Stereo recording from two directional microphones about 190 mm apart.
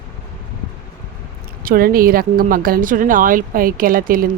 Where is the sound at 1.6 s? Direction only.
50° right (ahead or behind).